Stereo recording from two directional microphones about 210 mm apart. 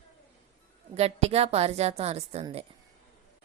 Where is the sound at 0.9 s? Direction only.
30° right (ahead or behind).